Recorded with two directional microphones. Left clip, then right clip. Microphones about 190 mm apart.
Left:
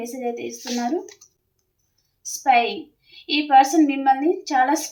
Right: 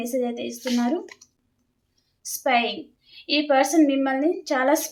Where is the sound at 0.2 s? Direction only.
20° right (ahead or behind).